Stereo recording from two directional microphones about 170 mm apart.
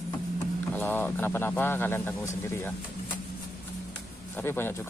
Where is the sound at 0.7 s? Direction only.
10° left (ahead or behind).